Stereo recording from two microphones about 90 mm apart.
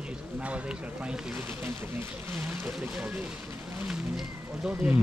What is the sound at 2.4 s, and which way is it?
Speech, 10° right (ahead or behind).